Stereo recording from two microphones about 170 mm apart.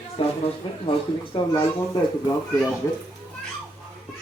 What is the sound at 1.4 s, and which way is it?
Speech, 30° left (ahead or behind).